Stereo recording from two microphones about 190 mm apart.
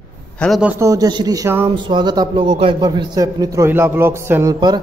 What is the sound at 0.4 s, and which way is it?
A man's voice, centre (ahead or behind).